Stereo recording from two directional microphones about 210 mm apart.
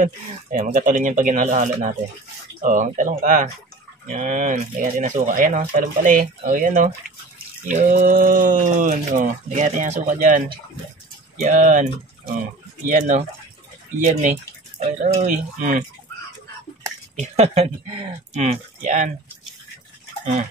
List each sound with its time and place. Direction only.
0.0 s speech: 40° right (ahead or behind)
17.2 s speech: 30° right (ahead or behind)